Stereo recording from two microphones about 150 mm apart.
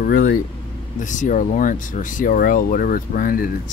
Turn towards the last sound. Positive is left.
turn(degrees=70)  # may be behind; listen again after turning